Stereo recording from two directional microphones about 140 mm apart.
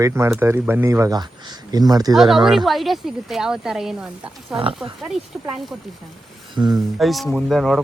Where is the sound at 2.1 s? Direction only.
Centre (ahead or behind).